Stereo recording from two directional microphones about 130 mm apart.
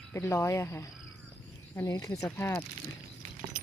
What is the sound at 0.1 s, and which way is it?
Speech, 20° left (ahead or behind).